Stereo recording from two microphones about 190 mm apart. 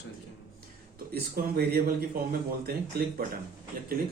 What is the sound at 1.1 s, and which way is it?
Speech, 55° right (ahead or behind).